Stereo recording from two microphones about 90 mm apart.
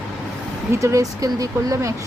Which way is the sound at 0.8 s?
40° right (ahead or behind).